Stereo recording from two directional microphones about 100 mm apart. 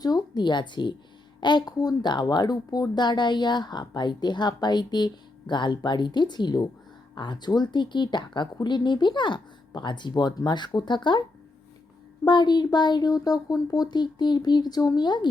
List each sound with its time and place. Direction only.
0.0 s a woman's voice: 40° left (ahead or behind)
12.2 s a woman's voice: 45° left (ahead or behind)